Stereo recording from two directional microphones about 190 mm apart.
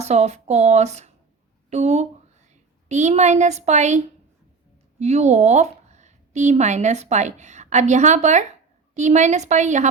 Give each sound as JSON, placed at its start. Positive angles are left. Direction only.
{"t": 0.0, "sound": "a woman's voice", "side_deg": -35}